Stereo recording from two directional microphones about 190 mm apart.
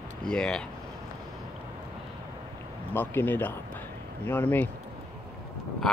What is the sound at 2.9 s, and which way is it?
Speech, 10° left (ahead or behind).